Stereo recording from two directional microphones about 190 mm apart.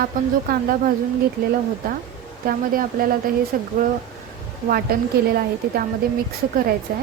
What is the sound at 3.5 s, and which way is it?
Speech, 45° right (ahead or behind).